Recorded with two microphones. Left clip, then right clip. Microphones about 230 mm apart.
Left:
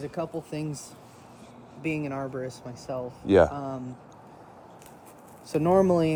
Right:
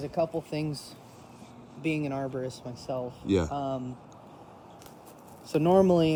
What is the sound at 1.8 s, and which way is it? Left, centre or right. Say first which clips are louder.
Speech: even; left.